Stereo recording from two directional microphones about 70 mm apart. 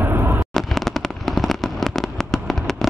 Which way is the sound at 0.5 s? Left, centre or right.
Centre.